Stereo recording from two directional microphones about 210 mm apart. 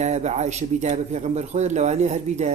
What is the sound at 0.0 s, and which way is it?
Speech, 35° right (ahead or behind).